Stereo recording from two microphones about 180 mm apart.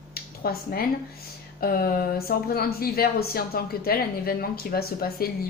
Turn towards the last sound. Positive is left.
turn(degrees=55)  # may be behind; listen again after turning